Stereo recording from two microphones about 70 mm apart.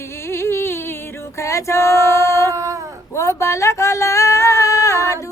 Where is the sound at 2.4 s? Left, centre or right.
Right.